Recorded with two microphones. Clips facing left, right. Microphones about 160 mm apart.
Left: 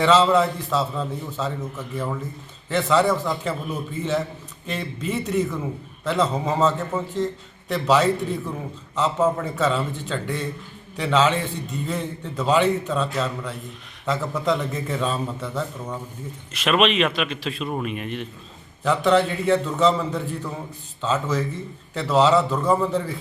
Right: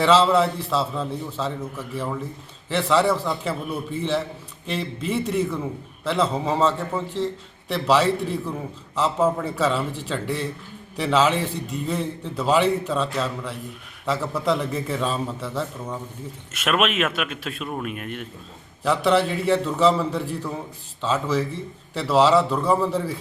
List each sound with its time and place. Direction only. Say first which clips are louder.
0.0 s a man's voice: even; centre (ahead or behind)